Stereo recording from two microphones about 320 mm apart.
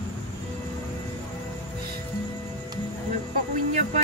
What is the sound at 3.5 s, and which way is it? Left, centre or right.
Music, right.